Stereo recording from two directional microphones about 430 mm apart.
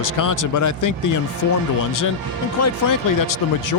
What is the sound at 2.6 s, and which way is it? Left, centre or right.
Speech, left.